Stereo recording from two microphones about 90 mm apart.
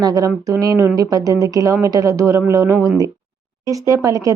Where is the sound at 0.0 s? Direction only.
40° right (ahead or behind).